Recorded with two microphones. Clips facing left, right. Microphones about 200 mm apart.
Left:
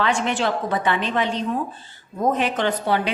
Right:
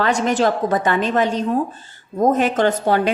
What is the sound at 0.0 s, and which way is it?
A woman's voice, 40° right (ahead or behind).